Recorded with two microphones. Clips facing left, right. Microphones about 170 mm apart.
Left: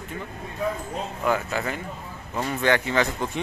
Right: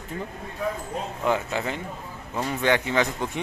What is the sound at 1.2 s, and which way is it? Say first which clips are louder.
Speech: even; 20° right (ahead or behind).